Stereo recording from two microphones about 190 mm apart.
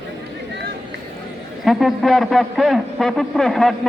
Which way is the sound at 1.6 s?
Centre (ahead or behind).